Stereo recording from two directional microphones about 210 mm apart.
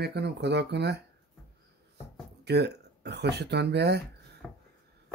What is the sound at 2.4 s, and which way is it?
Speech, 50° right (ahead or behind).